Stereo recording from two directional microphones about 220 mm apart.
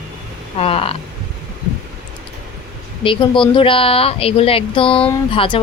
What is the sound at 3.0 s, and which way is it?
A woman's voice, 20° left (ahead or behind).